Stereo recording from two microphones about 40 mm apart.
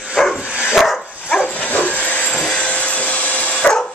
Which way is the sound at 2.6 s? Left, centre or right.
Left.